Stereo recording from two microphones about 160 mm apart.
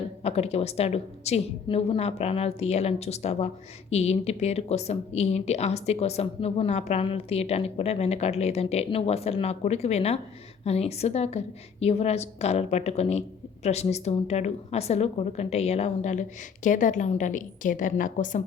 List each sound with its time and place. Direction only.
0.2 s a woman's voice: 40° left (ahead or behind)